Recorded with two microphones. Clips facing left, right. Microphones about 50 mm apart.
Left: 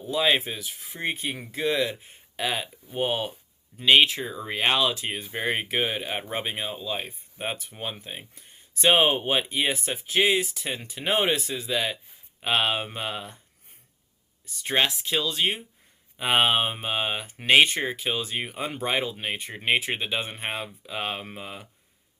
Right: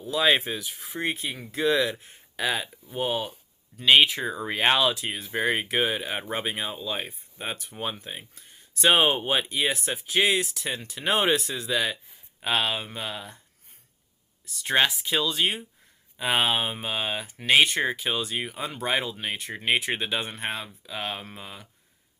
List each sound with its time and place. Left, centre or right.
0.3 s speech: centre
2.9 s speech: centre
3.8 s speech: centre
5.0 s speech: centre
5.3 s speech: centre
12.4 s speech: centre
14.6 s speech: centre
16.1 s speech: centre
17.7 s speech: centre
20.3 s speech: centre